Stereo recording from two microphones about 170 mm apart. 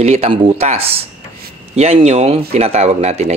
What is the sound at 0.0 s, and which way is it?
Speech, 35° right (ahead or behind).